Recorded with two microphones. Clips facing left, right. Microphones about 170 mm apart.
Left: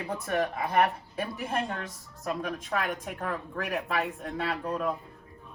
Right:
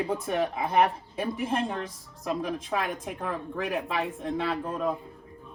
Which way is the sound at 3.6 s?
25° right (ahead or behind).